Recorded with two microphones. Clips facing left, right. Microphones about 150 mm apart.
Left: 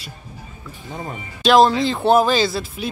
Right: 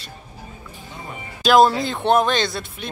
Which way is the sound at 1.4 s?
Centre (ahead or behind).